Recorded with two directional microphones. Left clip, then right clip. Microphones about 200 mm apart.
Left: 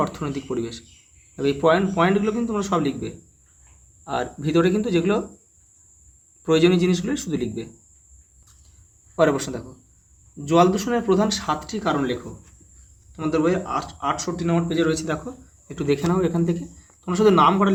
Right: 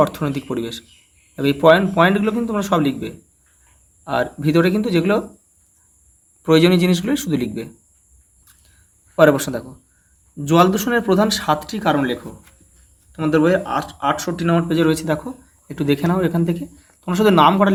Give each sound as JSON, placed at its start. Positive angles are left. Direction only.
{"t": 0.0, "sound": "speech", "side_deg": -30}
{"t": 6.4, "sound": "speech", "side_deg": -25}
{"t": 9.1, "sound": "speech", "side_deg": -30}
{"t": 13.1, "sound": "speech", "side_deg": -30}